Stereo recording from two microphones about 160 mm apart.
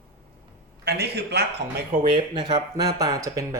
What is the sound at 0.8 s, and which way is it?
Speech, 90° right.